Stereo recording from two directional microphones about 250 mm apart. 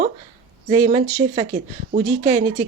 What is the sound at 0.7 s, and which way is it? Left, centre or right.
Speech, right.